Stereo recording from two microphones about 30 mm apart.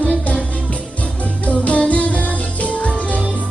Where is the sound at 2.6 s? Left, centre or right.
Left.